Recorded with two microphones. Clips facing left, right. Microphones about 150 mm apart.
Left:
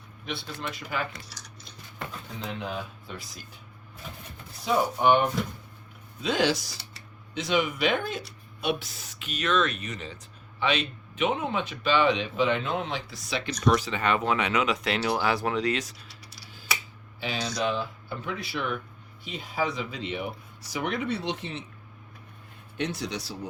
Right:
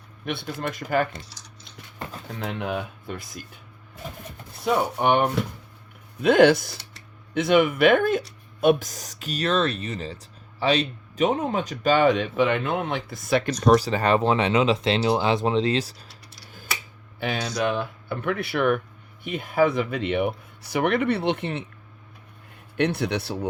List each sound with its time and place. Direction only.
0.3 s speech: 55° right (ahead or behind)
2.4 s speech: 60° right (ahead or behind)
4.6 s speech: 60° right (ahead or behind)
13.6 s speech: 35° right (ahead or behind)
17.2 s speech: 55° right (ahead or behind)
22.8 s speech: 60° right (ahead or behind)